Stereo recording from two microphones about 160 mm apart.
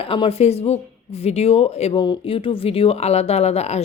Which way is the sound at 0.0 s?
35° left (ahead or behind).